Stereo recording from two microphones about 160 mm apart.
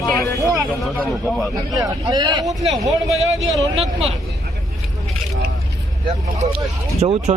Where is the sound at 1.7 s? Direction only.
25° right (ahead or behind).